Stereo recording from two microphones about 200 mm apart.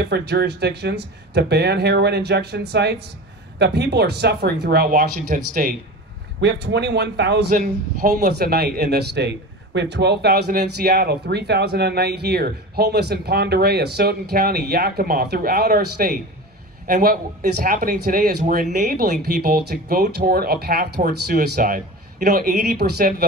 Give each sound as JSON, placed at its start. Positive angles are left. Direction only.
{"t": 0.0, "sound": "a man's voice", "side_deg": -55}
{"t": 6.4, "sound": "a man's voice", "side_deg": -60}